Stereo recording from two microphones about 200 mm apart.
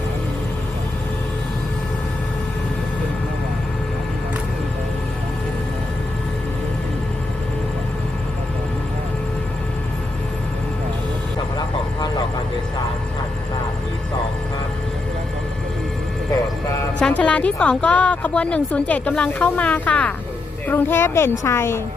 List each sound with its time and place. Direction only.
11.5 s vehicle: 20° left (ahead or behind)
16.6 s speech: 5° left (ahead or behind)